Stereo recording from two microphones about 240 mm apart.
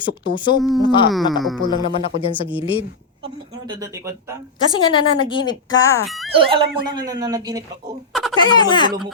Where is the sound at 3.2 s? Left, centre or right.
Centre.